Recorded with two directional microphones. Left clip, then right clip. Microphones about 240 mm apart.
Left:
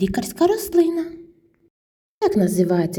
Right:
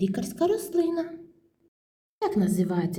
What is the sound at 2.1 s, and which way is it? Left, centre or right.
Speech, left.